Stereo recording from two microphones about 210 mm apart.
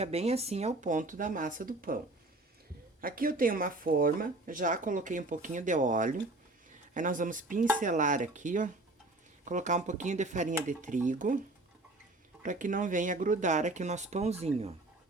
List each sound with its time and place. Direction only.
0.0 s speech: 30° right (ahead or behind)
3.0 s speech: 45° right (ahead or behind)
12.4 s speech: 40° right (ahead or behind)